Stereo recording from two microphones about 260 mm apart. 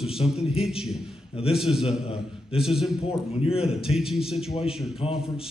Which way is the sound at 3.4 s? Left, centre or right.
Left.